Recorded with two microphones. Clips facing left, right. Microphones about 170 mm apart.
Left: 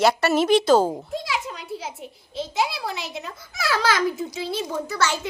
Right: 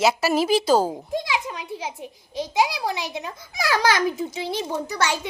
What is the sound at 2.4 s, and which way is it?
A child's voice, 15° right (ahead or behind).